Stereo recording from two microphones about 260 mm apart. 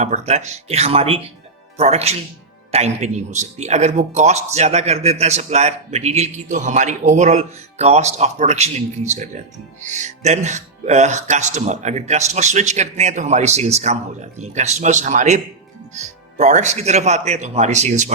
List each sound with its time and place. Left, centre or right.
0.0 s a man's voice: right